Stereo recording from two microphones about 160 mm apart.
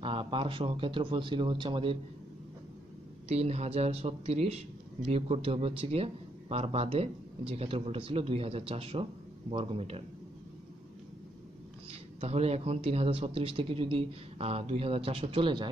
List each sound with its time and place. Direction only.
0.0 s a man's voice: 35° right (ahead or behind)
3.3 s a man's voice: 40° right (ahead or behind)
11.9 s a man's voice: 40° right (ahead or behind)